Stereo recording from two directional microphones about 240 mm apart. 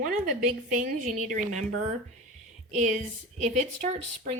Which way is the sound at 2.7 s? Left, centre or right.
Right.